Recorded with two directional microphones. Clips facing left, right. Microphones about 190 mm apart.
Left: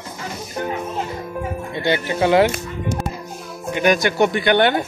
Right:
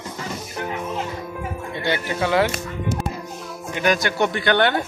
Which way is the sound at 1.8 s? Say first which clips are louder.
Left 5 dB; 20° left (ahead or behind).